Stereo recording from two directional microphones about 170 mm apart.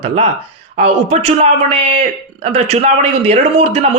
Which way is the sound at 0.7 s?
40° right (ahead or behind).